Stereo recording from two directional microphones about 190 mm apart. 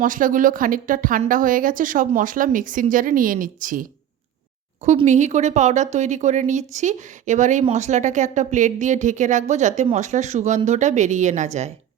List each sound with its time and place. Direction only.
0.0 s a woman's voice: 45° right (ahead or behind)